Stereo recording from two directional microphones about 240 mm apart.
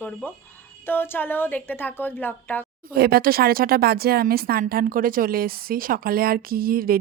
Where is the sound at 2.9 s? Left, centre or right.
Right.